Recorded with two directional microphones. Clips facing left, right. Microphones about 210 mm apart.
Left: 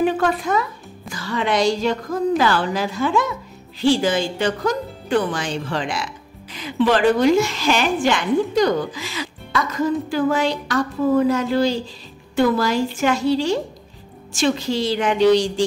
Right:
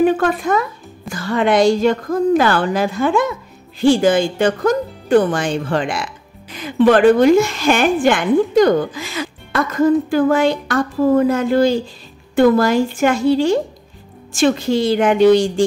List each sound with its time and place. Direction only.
0.0 s a woman's voice: 50° right (ahead or behind)